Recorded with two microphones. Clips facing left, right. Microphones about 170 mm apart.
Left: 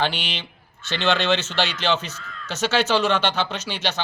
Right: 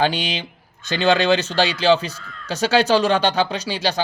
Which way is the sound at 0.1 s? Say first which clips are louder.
Right 6 dB; 15° right (ahead or behind).